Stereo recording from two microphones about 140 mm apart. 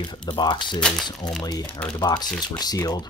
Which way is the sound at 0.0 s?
35° left (ahead or behind).